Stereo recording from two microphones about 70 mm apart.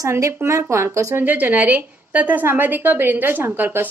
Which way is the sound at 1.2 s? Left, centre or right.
Right.